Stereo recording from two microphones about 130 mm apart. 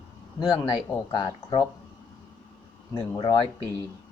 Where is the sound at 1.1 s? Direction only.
30° left (ahead or behind).